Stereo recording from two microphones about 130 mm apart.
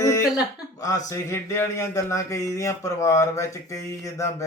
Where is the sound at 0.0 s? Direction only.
25° left (ahead or behind).